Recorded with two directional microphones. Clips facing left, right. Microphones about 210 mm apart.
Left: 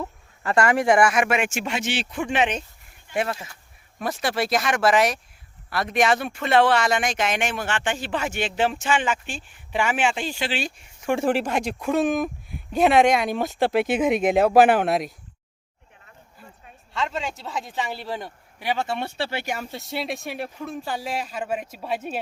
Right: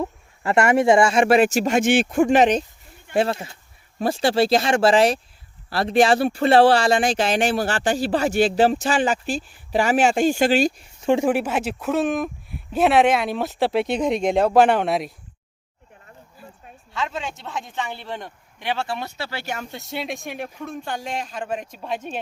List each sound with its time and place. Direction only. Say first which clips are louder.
0.0 s speech: right 5 dB; 25° right (ahead or behind); by 10.8 s 40° right (ahead or behind)
11.0 s speech: right 5 dB; 20° right (ahead or behind)
11.3 s speech: right 1 dB; 5° right (ahead or behind)
16.9 s speech: even; centre (ahead or behind)
18.9 s speech: left 2 dB; 30° left (ahead or behind)
19.4 s speech: left 1 dB; 10° left (ahead or behind)